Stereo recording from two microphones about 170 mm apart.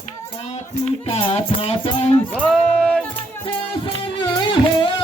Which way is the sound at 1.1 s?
35° left (ahead or behind).